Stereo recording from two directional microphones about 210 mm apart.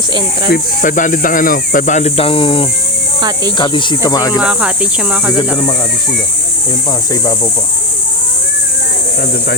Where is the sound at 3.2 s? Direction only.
20° right (ahead or behind).